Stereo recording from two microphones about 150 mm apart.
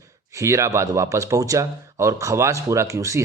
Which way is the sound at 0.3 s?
20° right (ahead or behind).